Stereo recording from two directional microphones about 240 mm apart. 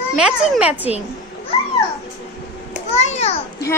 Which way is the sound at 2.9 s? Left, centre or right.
Left.